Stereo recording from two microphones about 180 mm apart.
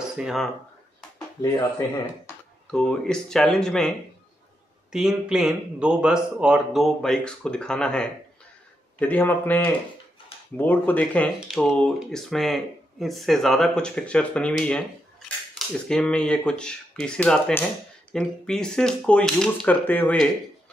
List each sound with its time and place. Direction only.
0.2 s speech: centre (ahead or behind)
1.4 s speech: 15° left (ahead or behind)
2.7 s speech: 5° left (ahead or behind)
4.9 s speech: 5° right (ahead or behind)
15.9 s speech: 5° left (ahead or behind)